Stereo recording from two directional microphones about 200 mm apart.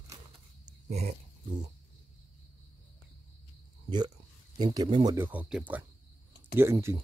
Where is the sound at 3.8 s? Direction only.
20° right (ahead or behind).